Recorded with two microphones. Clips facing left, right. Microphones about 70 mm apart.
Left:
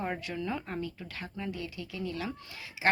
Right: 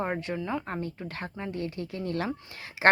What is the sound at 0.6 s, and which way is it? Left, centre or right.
Speech, right.